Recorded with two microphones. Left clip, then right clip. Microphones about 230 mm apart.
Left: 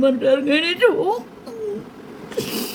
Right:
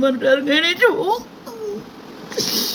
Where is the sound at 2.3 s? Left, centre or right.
Left.